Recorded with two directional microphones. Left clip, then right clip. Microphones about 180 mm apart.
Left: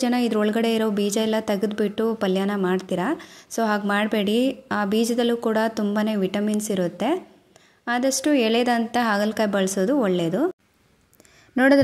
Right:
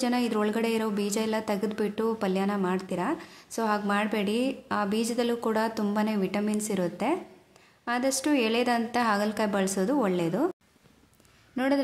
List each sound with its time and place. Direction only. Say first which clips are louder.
0.0 s speech: left 5 dB; 25° left (ahead or behind)
11.5 s speech: left 10 dB; 35° left (ahead or behind)